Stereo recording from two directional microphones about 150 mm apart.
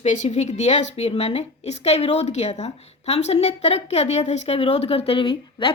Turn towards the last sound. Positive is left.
turn(degrees=35)  # may be behind; listen again after turning